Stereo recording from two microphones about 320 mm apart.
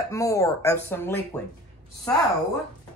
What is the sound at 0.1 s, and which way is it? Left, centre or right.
Speech, centre.